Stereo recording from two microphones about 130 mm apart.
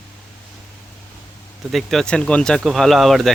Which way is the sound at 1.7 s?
Centre (ahead or behind).